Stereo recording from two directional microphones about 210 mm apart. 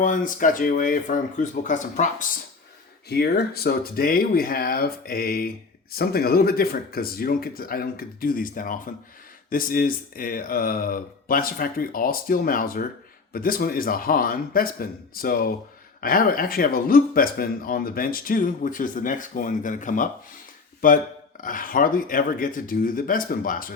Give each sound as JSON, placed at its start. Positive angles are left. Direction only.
{"t": 0.0, "sound": "speech", "side_deg": 40}
{"t": 3.1, "sound": "speech", "side_deg": 50}